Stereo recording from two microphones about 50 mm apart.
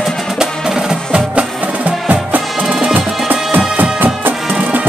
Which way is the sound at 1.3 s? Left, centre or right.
Right.